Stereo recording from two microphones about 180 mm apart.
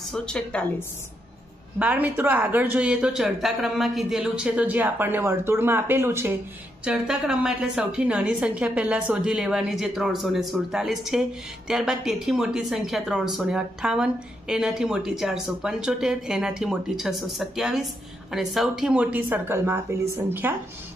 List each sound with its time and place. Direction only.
0.1 s a woman's voice: 5° left (ahead or behind)
1.8 s a woman's voice: 5° right (ahead or behind)